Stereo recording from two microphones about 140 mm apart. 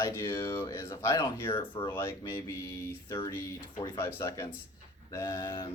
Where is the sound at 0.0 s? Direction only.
20° left (ahead or behind).